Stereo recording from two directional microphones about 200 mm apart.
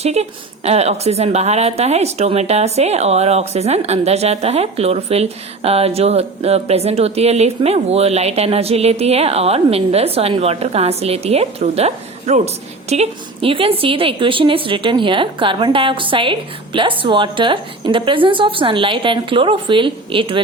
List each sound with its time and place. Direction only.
0.0 s a woman's voice: 30° right (ahead or behind)